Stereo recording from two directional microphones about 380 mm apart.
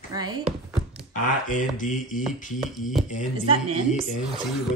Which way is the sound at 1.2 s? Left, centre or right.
Centre.